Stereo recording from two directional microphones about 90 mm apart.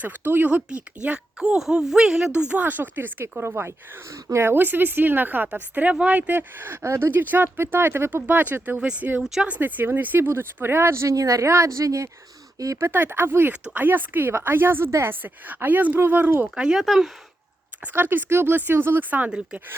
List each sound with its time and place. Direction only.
0.0 s speech: 20° right (ahead or behind)
2.5 s speech: 20° right (ahead or behind); by 12.8 s 40° right (ahead or behind)
12.8 s speech: 20° right (ahead or behind)
16.6 s speech: 10° right (ahead or behind)
17.9 s speech: 25° right (ahead or behind)